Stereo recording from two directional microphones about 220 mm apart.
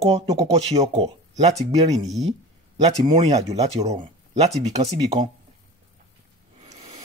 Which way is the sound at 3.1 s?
30° right (ahead or behind).